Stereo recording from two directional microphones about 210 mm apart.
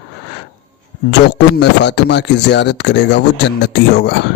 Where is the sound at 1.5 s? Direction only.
55° left (ahead or behind).